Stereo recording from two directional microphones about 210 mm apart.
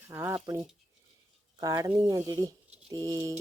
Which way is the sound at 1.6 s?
20° right (ahead or behind).